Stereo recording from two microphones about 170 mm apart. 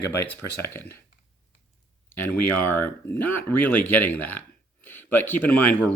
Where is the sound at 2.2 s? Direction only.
10° left (ahead or behind).